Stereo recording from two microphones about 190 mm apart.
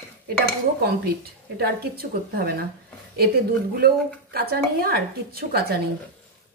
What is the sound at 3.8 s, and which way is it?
Speech, 55° right (ahead or behind).